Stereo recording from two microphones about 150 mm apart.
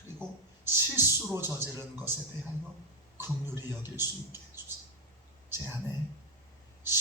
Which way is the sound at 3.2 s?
15° right (ahead or behind).